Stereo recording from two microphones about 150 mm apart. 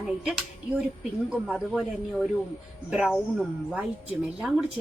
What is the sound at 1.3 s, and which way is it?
Speech, 5° right (ahead or behind).